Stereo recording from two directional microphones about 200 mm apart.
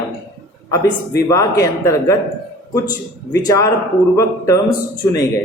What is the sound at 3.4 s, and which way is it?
Speech, 15° left (ahead or behind).